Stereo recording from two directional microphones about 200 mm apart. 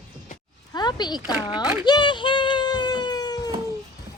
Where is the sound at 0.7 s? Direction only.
20° left (ahead or behind).